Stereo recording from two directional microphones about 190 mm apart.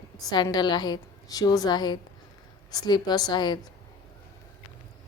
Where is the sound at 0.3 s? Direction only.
20° left (ahead or behind).